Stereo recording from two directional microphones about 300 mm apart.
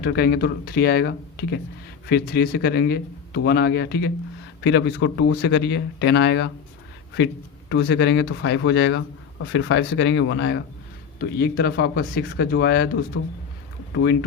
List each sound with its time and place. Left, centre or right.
0.0 s a man's voice: left
7.7 s a man's voice: left